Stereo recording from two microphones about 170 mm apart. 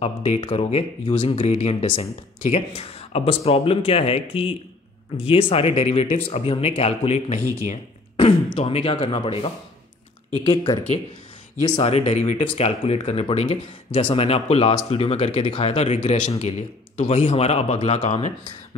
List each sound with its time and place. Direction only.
0.0 s speech: 35° left (ahead or behind)
7.6 s a sound: 45° left (ahead or behind)
8.3 s speech: 30° left (ahead or behind)
11.9 s speech: 40° left (ahead or behind)